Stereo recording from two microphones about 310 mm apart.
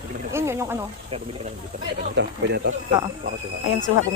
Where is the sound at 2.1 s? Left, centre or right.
Right.